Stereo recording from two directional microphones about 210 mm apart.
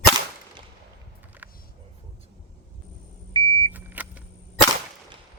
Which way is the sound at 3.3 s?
20° right (ahead or behind).